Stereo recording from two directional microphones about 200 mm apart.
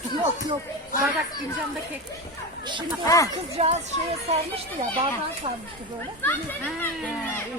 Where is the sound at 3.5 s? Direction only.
30° right (ahead or behind).